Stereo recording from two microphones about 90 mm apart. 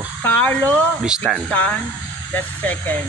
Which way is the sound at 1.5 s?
15° left (ahead or behind).